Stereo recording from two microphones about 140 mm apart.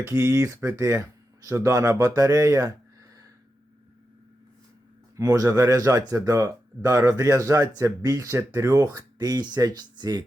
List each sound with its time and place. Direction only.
0.0 s speech: 20° right (ahead or behind)
5.1 s speech: 25° right (ahead or behind)